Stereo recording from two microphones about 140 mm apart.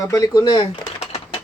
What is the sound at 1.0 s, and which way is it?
Typewriter, 45° left (ahead or behind).